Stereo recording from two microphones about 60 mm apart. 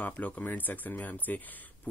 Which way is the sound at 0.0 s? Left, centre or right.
Left.